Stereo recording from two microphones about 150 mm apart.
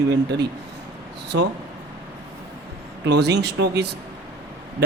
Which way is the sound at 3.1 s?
90° right.